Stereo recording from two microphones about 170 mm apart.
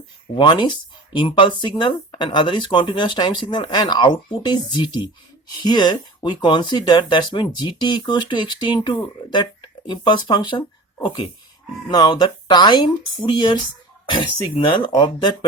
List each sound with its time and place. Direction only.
0.3 s speech: 25° left (ahead or behind)
11.9 s speech: 25° left (ahead or behind)